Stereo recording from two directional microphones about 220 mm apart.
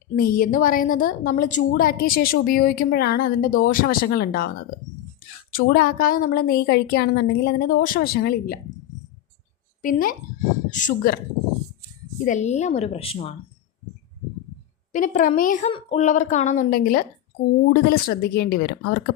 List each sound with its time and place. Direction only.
0.2 s a woman's voice: 40° left (ahead or behind)
9.8 s a woman's voice: 40° left (ahead or behind)
12.2 s a woman's voice: 35° left (ahead or behind)
14.9 s a woman's voice: 35° left (ahead or behind)